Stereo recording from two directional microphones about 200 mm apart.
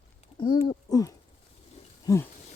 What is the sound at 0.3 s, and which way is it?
Speech, 20° left (ahead or behind).